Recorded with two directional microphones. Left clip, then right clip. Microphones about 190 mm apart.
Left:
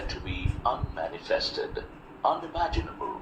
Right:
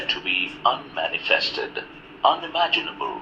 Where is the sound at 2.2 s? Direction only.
5° right (ahead or behind).